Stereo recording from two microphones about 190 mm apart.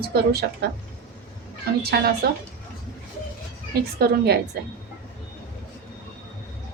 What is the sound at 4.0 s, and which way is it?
Speech, 55° right (ahead or behind).